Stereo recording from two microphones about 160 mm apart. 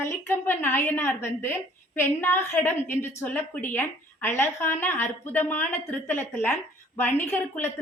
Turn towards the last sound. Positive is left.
turn(degrees=15)  # may be behind; listen again after turning